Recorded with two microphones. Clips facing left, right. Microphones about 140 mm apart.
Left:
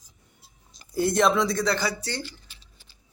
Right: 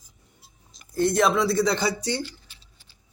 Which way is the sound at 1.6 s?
20° right (ahead or behind).